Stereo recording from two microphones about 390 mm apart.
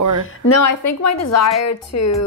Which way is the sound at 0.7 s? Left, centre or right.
Left.